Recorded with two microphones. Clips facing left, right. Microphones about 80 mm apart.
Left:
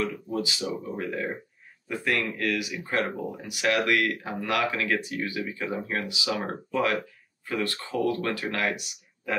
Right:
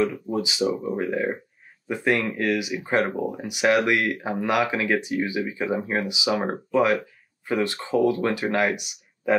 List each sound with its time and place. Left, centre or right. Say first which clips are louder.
0.0 s speech: right 5 dB; centre